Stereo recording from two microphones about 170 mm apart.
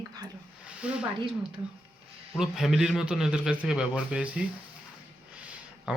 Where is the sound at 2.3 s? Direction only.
Centre (ahead or behind).